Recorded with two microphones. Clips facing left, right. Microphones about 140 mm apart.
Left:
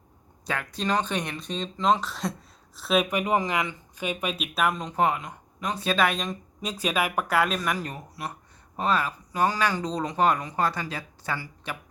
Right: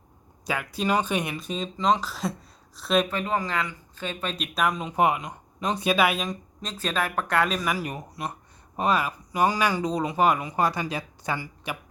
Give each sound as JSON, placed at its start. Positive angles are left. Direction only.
{"t": 0.4, "sound": "speech", "side_deg": -5}
{"t": 3.1, "sound": "speech", "side_deg": 15}
{"t": 5.9, "sound": "speech", "side_deg": -10}
{"t": 6.6, "sound": "speech", "side_deg": 10}
{"t": 7.9, "sound": "speech", "side_deg": -20}